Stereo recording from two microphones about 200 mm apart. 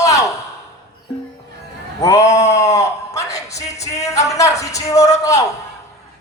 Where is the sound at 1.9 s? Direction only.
15° left (ahead or behind).